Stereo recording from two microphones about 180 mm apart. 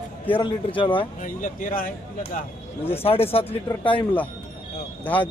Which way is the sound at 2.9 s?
35° left (ahead or behind).